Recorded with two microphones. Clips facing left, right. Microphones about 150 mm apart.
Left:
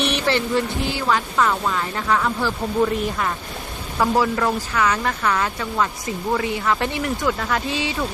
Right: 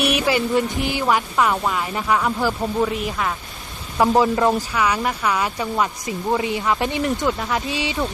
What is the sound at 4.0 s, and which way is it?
Speech, 20° right (ahead or behind).